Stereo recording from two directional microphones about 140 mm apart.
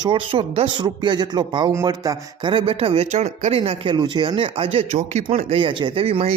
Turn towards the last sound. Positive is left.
turn(degrees=-45)  # may be behind; listen again after turning